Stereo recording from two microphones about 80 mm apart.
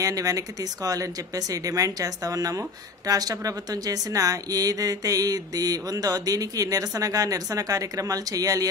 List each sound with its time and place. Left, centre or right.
0.0 s speech: right